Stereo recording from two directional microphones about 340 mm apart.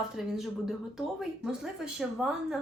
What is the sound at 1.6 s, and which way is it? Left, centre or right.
Speech, centre.